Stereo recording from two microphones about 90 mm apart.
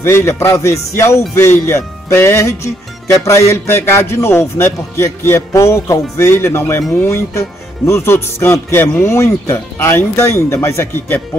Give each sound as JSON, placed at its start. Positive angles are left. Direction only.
{"t": 0.0, "sound": "music", "side_deg": 30}
{"t": 3.2, "sound": "speech", "side_deg": 35}